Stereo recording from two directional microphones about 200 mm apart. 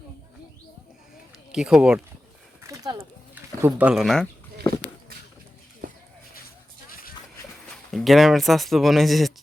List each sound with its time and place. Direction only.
1.5 s speech: 5° right (ahead or behind)
2.6 s a sound: 15° right (ahead or behind)
3.6 s speech: 5° right (ahead or behind)
7.9 s speech: centre (ahead or behind)